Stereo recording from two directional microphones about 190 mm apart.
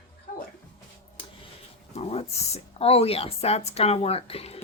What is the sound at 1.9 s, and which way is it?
Speech, 30° left (ahead or behind).